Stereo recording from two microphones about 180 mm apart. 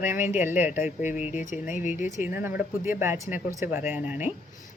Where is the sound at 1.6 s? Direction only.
45° left (ahead or behind).